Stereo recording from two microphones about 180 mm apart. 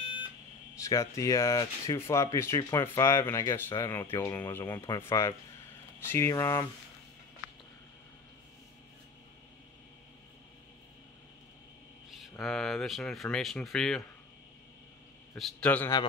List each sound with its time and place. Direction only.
0.7 s speech: 15° left (ahead or behind)
12.1 s speech: centre (ahead or behind)
15.3 s speech: 5° left (ahead or behind)